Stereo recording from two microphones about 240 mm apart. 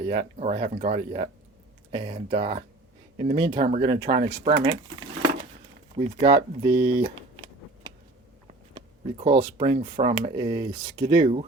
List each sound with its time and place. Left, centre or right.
0.0 s speech: right
6.1 s a sound: centre
9.6 s speech: right